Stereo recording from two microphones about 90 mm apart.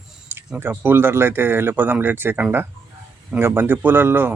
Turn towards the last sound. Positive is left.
turn(degrees=-25)  # may be behind; listen again after turning